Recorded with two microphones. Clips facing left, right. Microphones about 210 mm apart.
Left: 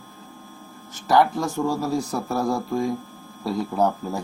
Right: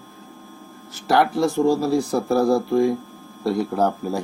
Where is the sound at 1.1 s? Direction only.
70° right (ahead or behind).